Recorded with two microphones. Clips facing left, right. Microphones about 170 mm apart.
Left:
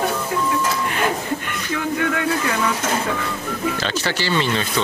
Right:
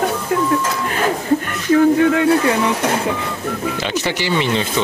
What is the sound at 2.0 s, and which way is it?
Speech, 25° right (ahead or behind).